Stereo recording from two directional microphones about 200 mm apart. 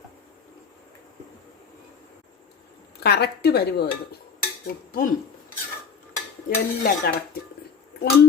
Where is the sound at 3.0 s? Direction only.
55° left (ahead or behind).